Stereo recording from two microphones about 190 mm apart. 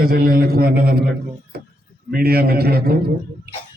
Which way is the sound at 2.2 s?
55° right (ahead or behind).